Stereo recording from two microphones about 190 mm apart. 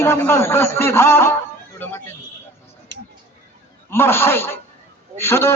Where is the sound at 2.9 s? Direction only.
65° right (ahead or behind).